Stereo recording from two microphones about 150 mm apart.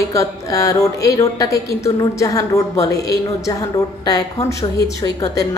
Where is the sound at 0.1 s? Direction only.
20° left (ahead or behind).